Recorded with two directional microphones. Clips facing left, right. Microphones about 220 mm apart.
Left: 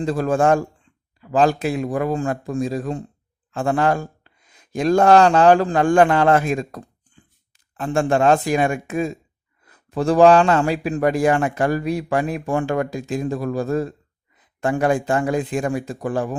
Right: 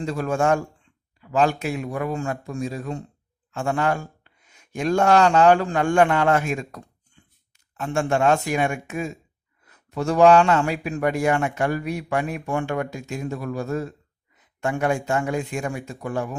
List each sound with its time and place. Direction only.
0.0 s a man's voice: 35° left (ahead or behind)
7.8 s a man's voice: 35° left (ahead or behind)